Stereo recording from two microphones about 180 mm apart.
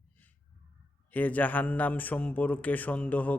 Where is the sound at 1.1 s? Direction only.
10° left (ahead or behind).